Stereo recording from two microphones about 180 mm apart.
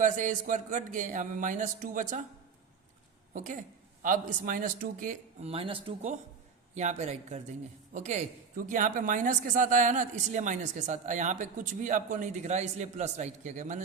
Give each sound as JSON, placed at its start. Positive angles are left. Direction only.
{"t": 0.0, "sound": "speech", "side_deg": -45}
{"t": 3.3, "sound": "speech", "side_deg": -45}
{"t": 5.5, "sound": "speech", "side_deg": -30}